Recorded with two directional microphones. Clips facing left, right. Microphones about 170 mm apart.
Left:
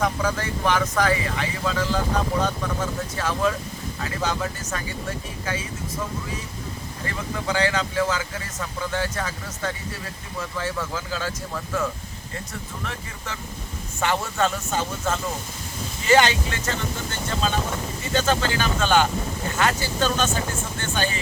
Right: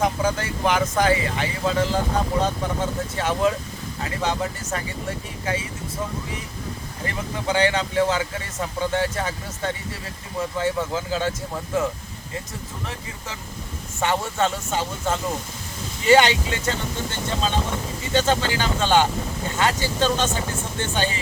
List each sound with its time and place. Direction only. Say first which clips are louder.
0.0 s speech: right 2 dB; 25° right (ahead or behind)
7.4 s speech: right 3 dB; 25° right (ahead or behind)
14.0 s speech: right 1 dB; 25° right (ahead or behind)
18.1 s speech: right 2 dB; 25° right (ahead or behind)